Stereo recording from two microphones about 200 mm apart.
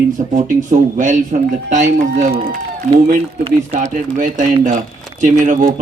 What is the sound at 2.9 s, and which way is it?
Speech, 30° right (ahead or behind).